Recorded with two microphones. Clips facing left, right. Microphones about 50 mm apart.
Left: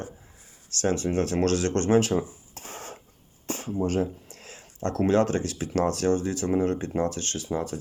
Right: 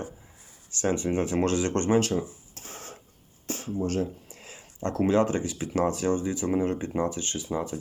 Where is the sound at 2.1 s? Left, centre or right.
Left.